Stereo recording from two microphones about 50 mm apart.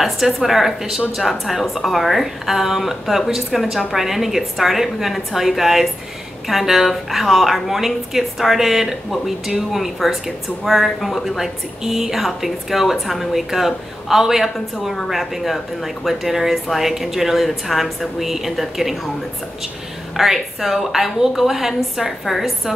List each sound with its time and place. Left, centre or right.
0.0 s a woman's voice: centre
20.2 s a woman's voice: centre